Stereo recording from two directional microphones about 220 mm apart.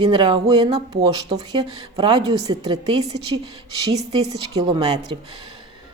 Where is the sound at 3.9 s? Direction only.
30° right (ahead or behind).